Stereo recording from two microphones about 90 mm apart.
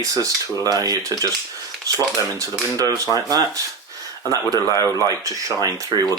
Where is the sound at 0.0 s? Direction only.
40° right (ahead or behind).